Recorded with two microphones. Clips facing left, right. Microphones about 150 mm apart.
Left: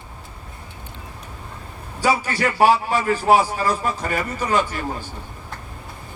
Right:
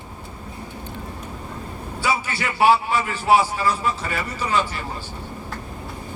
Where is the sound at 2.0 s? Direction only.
40° left (ahead or behind).